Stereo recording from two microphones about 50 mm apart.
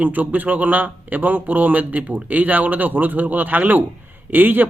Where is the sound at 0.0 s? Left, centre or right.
Right.